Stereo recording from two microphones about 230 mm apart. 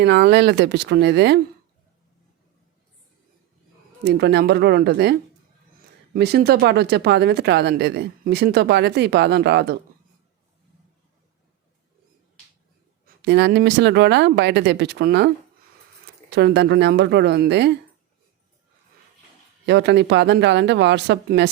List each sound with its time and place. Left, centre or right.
0.0 s speech: right
4.0 s speech: right
13.1 s speech: right
16.3 s speech: right
19.6 s speech: right